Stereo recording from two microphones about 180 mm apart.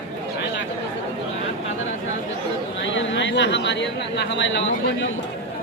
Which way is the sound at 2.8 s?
85° left.